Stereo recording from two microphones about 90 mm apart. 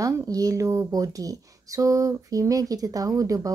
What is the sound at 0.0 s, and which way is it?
Speech, 40° right (ahead or behind).